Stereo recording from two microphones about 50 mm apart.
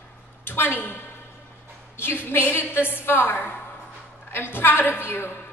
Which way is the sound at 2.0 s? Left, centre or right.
Left.